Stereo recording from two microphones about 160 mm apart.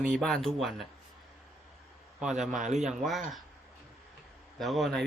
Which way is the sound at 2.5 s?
50° right (ahead or behind).